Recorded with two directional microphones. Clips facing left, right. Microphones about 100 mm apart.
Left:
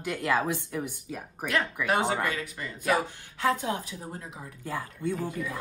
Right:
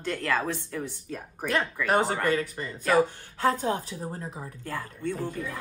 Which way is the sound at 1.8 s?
40° right (ahead or behind).